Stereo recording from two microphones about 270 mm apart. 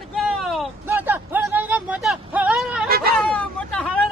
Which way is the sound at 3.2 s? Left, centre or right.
Centre.